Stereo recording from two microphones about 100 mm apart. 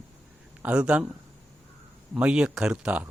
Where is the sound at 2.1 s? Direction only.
10° right (ahead or behind).